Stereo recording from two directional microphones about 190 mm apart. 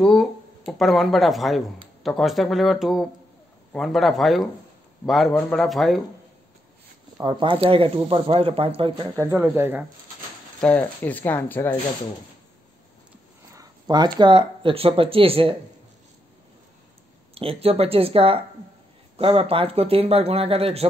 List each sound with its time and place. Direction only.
0.0 s a man's voice: centre (ahead or behind)
7.2 s speech: 25° right (ahead or behind)
9.0 s speech: 10° right (ahead or behind)
10.6 s speech: 10° left (ahead or behind)
13.6 s speech: 20° right (ahead or behind)
17.3 s speech: 30° right (ahead or behind)